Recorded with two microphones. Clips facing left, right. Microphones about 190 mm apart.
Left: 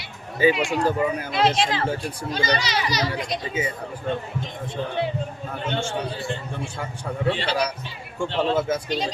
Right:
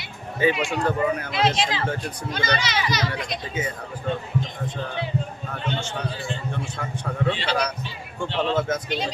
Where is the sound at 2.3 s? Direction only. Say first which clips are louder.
Left 1 dB; 35° left (ahead or behind).